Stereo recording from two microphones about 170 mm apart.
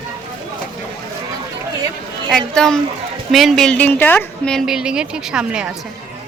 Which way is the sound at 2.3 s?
5° left (ahead or behind).